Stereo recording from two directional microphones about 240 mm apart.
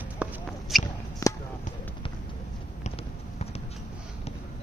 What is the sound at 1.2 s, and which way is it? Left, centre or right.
Basketball bounce, centre.